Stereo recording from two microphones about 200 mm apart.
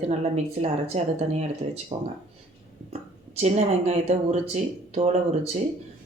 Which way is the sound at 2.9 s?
30° right (ahead or behind).